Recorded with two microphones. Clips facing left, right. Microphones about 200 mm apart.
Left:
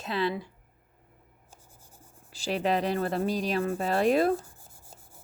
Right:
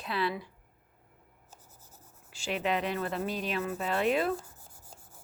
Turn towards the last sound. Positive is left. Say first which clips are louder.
# left 5 dB
turn(degrees=40)  # may be behind; listen again after turning